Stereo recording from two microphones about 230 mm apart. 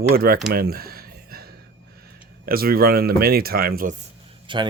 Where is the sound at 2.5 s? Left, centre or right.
Right.